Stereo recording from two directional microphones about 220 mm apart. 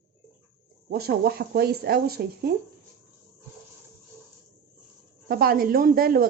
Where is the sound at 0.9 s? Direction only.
45° right (ahead or behind).